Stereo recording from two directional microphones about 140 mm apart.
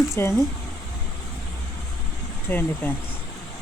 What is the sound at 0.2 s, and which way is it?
Speech, 20° left (ahead or behind).